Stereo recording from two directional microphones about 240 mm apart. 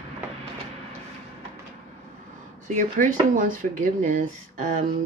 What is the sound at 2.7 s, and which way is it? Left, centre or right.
Speech, right.